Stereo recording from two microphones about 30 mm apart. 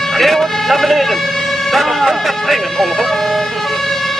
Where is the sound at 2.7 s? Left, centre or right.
Centre.